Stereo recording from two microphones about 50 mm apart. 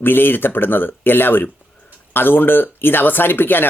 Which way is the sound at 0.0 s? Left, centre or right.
Left.